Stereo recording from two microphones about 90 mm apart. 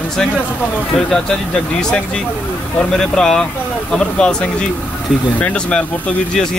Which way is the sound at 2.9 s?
5° left (ahead or behind).